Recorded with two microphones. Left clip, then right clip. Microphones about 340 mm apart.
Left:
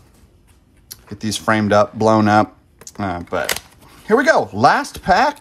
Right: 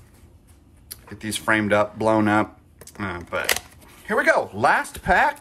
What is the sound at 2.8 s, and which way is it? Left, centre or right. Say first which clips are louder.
Typing: left 6 dB; centre.